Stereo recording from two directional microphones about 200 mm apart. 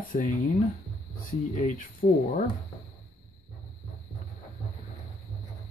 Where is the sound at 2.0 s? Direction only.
30° left (ahead or behind).